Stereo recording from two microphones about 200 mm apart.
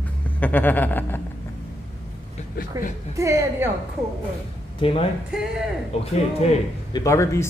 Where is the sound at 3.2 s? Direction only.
15° right (ahead or behind).